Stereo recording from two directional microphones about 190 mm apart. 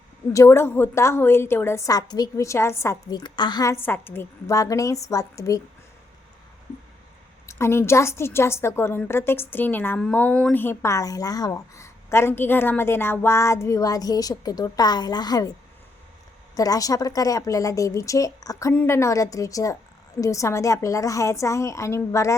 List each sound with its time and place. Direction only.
0.3 s a woman's voice: 15° left (ahead or behind)
7.4 s a woman's voice: 15° left (ahead or behind)
16.6 s a woman's voice: 20° left (ahead or behind)